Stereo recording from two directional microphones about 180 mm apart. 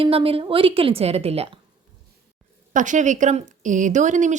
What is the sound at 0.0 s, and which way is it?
A woman's voice, 30° right (ahead or behind).